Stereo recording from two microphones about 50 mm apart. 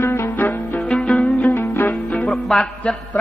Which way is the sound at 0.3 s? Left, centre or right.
Left.